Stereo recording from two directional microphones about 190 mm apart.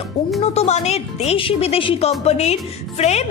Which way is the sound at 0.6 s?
35° left (ahead or behind).